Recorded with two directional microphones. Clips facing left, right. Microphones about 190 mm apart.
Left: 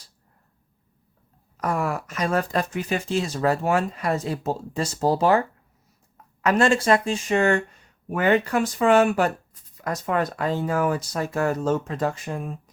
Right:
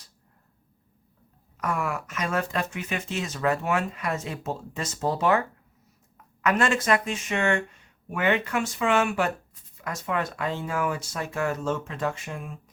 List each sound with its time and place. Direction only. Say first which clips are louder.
1.5 s speech: left 3 dB; 35° left (ahead or behind)